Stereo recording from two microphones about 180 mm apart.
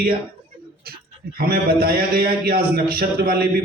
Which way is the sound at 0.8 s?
55° right (ahead or behind).